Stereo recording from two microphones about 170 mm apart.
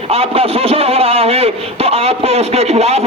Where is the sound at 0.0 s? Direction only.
35° right (ahead or behind).